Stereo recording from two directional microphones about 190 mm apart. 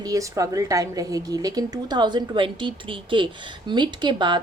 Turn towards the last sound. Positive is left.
turn(degrees=-25)  # may be behind; listen again after turning